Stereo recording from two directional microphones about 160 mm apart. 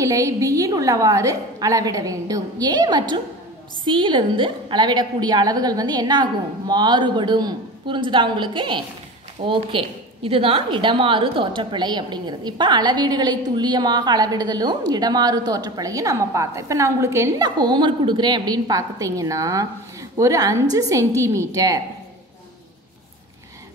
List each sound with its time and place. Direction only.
0.0 s a woman's voice: 20° right (ahead or behind)